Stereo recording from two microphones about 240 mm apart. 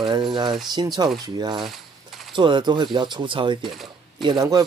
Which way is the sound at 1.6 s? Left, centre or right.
Centre.